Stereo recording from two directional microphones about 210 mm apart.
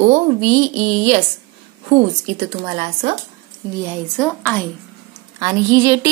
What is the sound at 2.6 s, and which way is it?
Speech, 30° right (ahead or behind).